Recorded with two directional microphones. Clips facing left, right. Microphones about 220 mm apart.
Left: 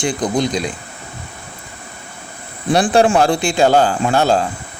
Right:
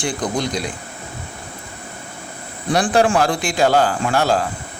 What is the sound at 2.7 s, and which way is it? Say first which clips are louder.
Speech: left 3 dB; 25° left (ahead or behind).